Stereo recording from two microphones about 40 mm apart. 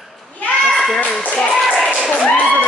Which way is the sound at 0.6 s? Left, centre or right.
Centre.